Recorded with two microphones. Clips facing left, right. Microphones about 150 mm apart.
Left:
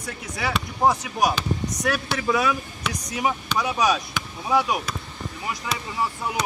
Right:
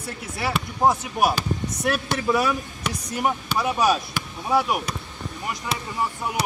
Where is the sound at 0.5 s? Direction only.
5° right (ahead or behind).